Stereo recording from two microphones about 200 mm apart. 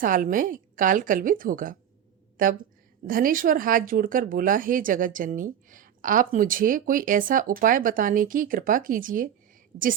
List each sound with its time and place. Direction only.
0.0 s speech: 45° right (ahead or behind)
3.1 s speech: 45° right (ahead or behind)